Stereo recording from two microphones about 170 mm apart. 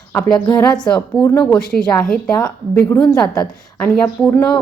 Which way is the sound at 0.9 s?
20° left (ahead or behind).